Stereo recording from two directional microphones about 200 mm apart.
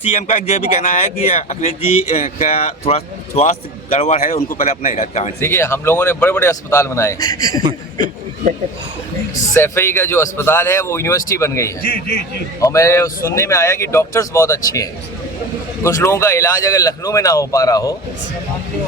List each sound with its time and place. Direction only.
0.1 s speech: 35° left (ahead or behind)
5.4 s speech: 10° left (ahead or behind)
9.6 s speech: 10° left (ahead or behind)
11.8 s a man's voice: 50° left (ahead or behind)
12.5 s speech: 15° left (ahead or behind)